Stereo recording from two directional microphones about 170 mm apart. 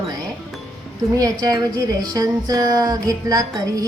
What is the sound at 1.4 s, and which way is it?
Speech, 20° right (ahead or behind).